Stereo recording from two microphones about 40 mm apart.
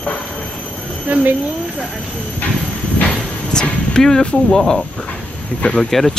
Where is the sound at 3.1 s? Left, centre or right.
Centre.